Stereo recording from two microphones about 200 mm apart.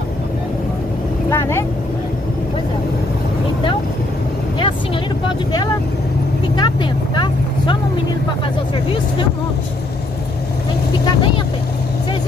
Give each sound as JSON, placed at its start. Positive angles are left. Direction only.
{"t": 1.3, "sound": "vehicle", "side_deg": 15}
{"t": 6.5, "sound": "vehicle", "side_deg": 20}